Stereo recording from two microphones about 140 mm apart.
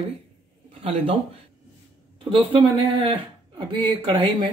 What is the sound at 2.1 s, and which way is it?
Speech, 40° right (ahead or behind).